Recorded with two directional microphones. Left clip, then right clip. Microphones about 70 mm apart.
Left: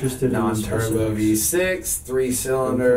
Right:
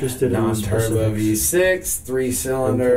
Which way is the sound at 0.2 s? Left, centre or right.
Right.